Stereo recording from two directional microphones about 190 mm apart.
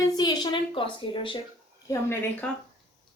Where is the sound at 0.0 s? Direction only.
20° left (ahead or behind).